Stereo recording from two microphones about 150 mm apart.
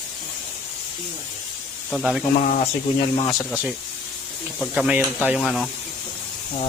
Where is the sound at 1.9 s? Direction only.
Centre (ahead or behind).